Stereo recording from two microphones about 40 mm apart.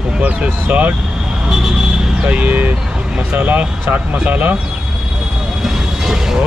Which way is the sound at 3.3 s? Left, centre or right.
Right.